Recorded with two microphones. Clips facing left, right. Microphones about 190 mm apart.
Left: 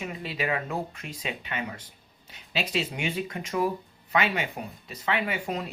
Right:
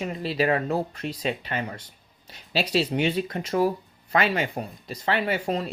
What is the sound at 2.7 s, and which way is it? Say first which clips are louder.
Speech: right 8 dB; 35° right (ahead or behind).